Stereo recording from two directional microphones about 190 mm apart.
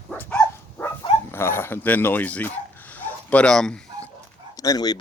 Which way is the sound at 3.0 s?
5° left (ahead or behind).